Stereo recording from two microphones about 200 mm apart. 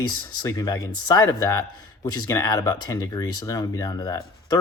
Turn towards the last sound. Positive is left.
turn(degrees=20)  # may be behind; listen again after turning